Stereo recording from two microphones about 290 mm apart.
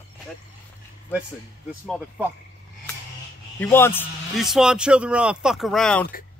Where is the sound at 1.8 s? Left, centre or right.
Centre.